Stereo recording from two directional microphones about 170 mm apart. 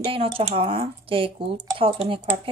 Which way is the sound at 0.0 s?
30° right (ahead or behind).